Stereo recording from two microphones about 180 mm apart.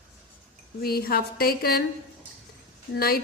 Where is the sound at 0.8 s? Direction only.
60° left (ahead or behind).